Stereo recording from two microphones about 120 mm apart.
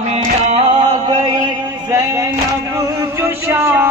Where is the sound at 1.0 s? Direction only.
35° right (ahead or behind); by 3.9 s 20° right (ahead or behind).